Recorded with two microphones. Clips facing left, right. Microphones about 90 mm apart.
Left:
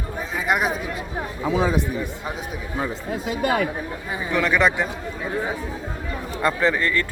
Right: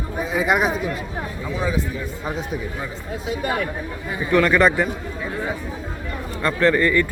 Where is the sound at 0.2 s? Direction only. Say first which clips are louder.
Right 3 dB; centre (ahead or behind).